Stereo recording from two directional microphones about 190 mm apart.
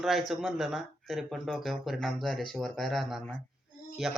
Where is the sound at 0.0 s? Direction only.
Centre (ahead or behind).